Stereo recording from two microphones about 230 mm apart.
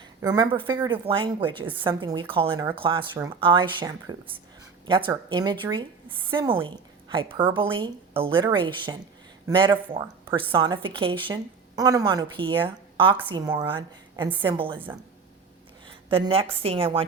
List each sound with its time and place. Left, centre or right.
0.2 s a woman's voice: centre